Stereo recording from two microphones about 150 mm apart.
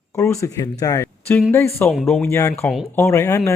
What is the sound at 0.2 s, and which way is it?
Speech, 20° left (ahead or behind).